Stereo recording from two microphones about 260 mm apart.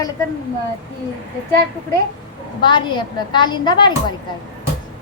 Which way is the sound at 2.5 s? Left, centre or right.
Centre.